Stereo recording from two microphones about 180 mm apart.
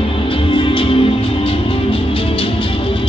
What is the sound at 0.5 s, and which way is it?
Music, 30° left (ahead or behind).